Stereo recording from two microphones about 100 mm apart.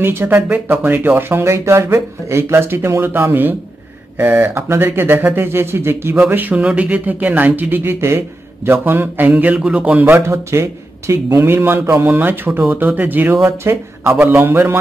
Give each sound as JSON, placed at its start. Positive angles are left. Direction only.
{"t": 0.0, "sound": "speech", "side_deg": -25}